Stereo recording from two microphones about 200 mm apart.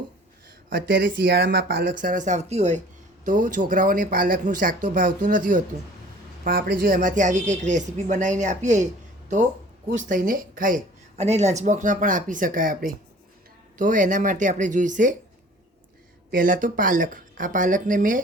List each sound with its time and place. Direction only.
0.9 s speech: 55° right (ahead or behind); by 8.9 s 35° right (ahead or behind)
9.9 s speech: 40° right (ahead or behind)
16.3 s speech: 45° right (ahead or behind)